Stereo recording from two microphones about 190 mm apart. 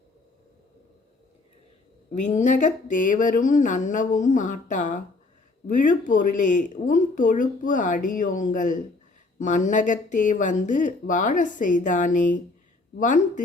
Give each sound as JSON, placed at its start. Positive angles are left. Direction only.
{"t": 2.2, "sound": "speech", "side_deg": 40}